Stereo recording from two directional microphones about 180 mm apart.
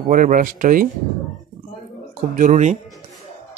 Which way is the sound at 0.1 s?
45° right (ahead or behind).